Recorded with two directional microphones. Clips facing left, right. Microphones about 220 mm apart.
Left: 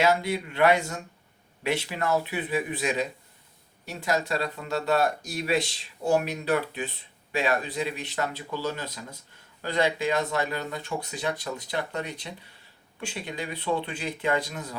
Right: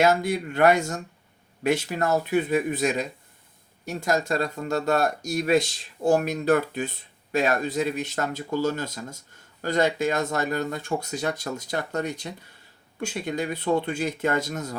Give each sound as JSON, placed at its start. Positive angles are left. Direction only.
{"t": 0.0, "sound": "speech", "side_deg": -45}